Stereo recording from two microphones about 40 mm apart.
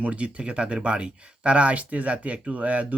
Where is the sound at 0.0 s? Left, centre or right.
Right.